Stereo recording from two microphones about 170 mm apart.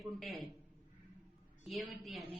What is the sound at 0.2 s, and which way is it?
Speech, centre (ahead or behind).